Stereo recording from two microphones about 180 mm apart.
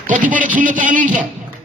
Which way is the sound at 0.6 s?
45° right (ahead or behind).